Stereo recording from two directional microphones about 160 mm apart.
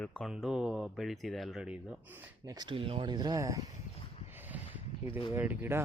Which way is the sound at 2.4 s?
25° right (ahead or behind).